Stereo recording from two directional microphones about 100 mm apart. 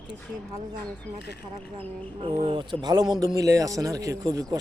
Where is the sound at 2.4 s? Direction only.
50° right (ahead or behind).